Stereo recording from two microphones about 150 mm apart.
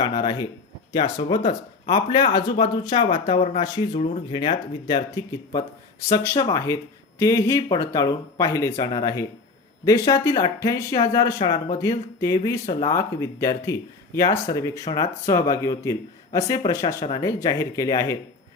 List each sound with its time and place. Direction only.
0.0 s speech: 30° left (ahead or behind)